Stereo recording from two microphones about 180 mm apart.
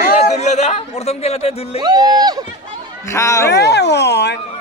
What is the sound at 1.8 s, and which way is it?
Speech, 20° right (ahead or behind).